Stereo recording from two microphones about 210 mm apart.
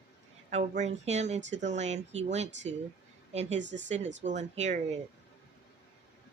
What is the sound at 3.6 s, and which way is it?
Speech, 60° right (ahead or behind).